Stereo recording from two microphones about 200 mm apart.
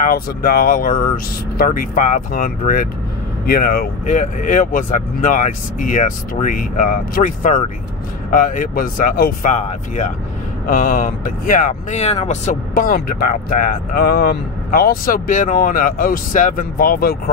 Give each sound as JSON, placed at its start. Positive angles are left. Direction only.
{"t": 0.0, "sound": "speech", "side_deg": 45}